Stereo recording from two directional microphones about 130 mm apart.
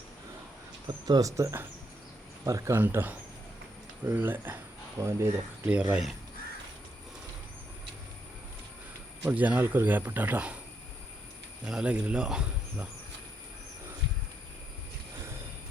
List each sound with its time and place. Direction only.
0.9 s speech: 30° right (ahead or behind)
5.7 s speech: 10° right (ahead or behind)
9.2 s speech: 10° right (ahead or behind)
11.6 s speech: 5° right (ahead or behind)